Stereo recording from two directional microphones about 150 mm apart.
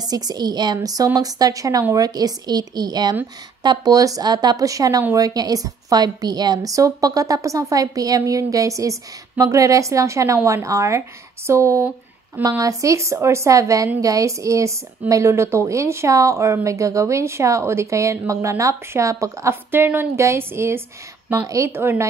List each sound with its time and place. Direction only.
0.0 s a woman's voice: 25° right (ahead or behind)